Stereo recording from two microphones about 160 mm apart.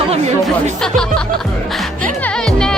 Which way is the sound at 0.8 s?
5° left (ahead or behind).